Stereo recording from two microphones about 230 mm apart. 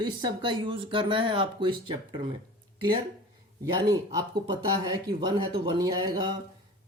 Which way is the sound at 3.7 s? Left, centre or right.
Centre.